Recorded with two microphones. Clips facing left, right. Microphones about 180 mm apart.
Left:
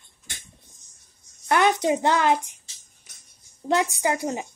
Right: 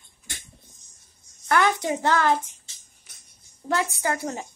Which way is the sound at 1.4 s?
20° left (ahead or behind).